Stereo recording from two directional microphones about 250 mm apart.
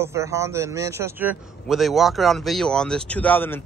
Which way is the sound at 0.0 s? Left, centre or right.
Centre.